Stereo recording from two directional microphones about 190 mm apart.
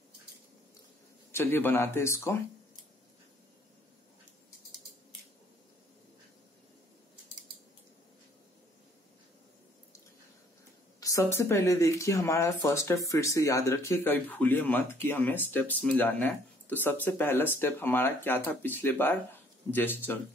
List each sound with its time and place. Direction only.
1.3 s speech: 10° left (ahead or behind)
11.0 s speech: 15° left (ahead or behind)